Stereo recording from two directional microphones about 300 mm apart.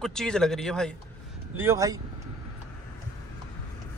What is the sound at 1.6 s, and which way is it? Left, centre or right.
Speech, centre.